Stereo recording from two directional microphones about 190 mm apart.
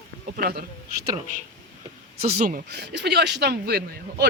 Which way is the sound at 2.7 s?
60° right (ahead or behind).